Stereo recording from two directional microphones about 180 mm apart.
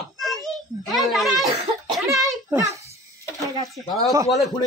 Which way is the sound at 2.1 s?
Centre (ahead or behind).